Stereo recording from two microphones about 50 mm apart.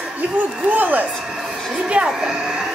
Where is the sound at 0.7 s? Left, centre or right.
Right.